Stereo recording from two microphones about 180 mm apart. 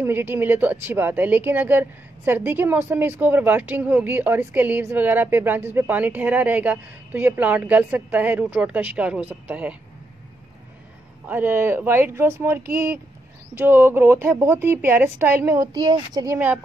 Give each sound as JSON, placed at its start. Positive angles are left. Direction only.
{"t": 0.0, "sound": "speech", "side_deg": -10}
{"t": 11.2, "sound": "speech", "side_deg": -10}